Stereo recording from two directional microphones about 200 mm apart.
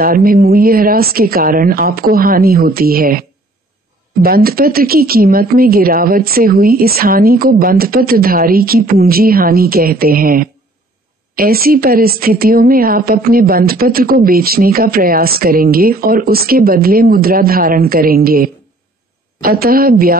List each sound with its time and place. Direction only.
0.0 s a woman's voice: 45° right (ahead or behind)